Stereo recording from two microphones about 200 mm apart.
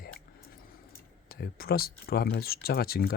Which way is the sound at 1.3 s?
50° left (ahead or behind).